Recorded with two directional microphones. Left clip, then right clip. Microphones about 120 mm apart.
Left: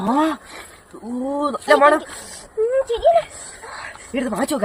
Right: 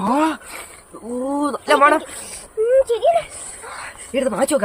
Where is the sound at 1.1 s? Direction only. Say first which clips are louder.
Right 1 dB; 40° right (ahead or behind).